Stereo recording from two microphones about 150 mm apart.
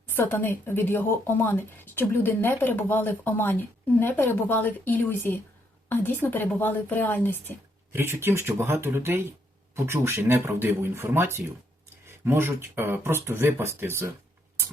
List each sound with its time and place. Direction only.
0.2 s speech: 15° left (ahead or behind)
7.9 s speech: 15° right (ahead or behind)
12.0 s a sound: 15° right (ahead or behind)
12.7 s speech: 15° right (ahead or behind)